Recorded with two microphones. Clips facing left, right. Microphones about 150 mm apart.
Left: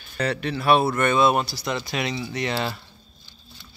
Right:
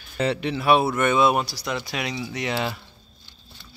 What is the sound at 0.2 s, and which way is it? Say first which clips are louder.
Speech: right 1 dB; 20° right (ahead or behind).